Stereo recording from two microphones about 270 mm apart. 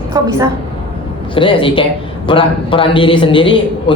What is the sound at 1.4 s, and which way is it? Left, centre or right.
Speech, centre.